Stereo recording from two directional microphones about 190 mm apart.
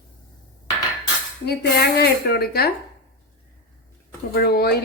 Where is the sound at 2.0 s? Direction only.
55° left (ahead or behind).